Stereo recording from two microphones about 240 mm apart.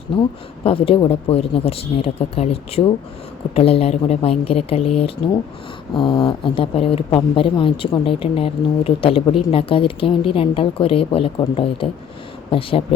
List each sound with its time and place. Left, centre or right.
0.2 s speech: left
5.9 s speech: centre